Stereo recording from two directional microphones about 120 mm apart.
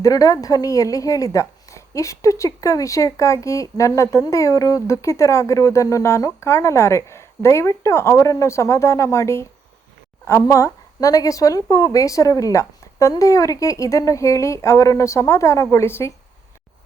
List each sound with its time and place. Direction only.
0.0 s speech: 30° left (ahead or behind)